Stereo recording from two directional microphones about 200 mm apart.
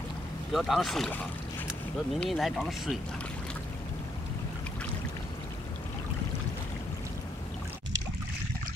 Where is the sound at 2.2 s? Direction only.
Centre (ahead or behind).